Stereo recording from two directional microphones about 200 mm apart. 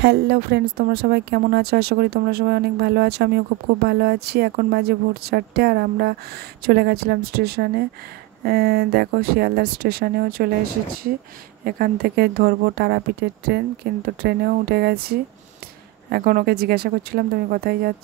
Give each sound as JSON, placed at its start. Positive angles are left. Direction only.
{"t": 0.0, "sound": "speech", "side_deg": -55}
{"t": 11.6, "sound": "speech", "side_deg": -45}